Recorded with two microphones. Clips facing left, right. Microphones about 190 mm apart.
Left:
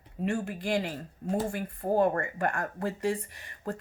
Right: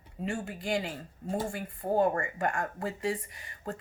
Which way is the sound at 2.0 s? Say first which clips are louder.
Even; 55° left (ahead or behind).